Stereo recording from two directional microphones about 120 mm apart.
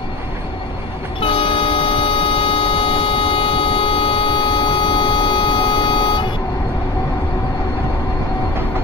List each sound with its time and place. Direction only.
1.2 s vehicle: 45° left (ahead or behind)